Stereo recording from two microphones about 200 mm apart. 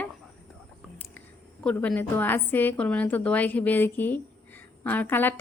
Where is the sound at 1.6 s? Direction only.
5° left (ahead or behind).